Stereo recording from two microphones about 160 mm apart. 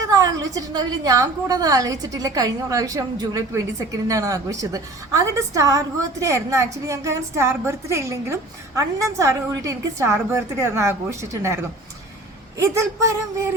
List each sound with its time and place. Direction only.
0.0 s a woman's voice: 20° right (ahead or behind)
12.6 s speech: 20° right (ahead or behind)